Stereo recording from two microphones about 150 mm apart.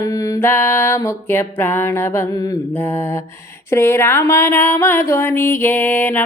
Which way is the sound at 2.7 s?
15° left (ahead or behind).